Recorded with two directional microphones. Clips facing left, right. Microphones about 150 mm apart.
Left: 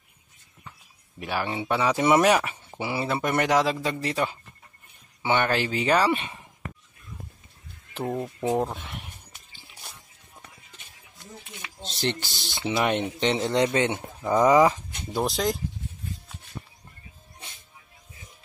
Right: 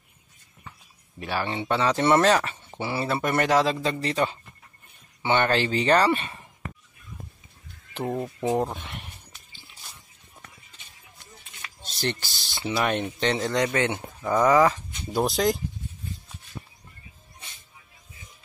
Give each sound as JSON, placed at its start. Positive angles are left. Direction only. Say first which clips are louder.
{"t": 1.2, "sound": "speech", "louder": "even", "side_deg": 10}
{"t": 7.9, "sound": "speech", "louder": "right 1 dB", "side_deg": 0}
{"t": 11.8, "sound": "speech", "louder": "left 1 dB", "side_deg": 20}
{"t": 15.1, "sound": "speech", "louder": "right 3 dB", "side_deg": 0}